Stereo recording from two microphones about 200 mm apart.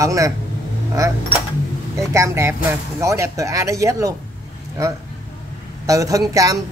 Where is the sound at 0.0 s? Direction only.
15° right (ahead or behind).